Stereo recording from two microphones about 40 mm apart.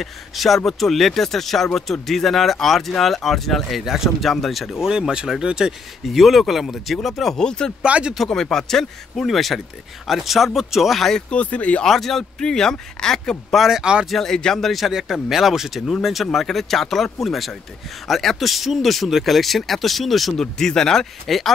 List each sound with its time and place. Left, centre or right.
0.0 s speech: centre
4.2 s speech: centre
5.4 s speech: right
5.7 s speech: centre
7.3 s speech: centre
7.8 s speech: right
8.3 s speech: centre
11.2 s speech: left
11.8 s speech: centre
13.6 s speech: centre
14.1 s speech: centre
14.9 s speech: centre
20.3 s speech: centre